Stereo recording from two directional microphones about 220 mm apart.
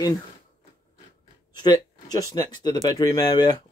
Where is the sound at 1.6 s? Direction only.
20° left (ahead or behind).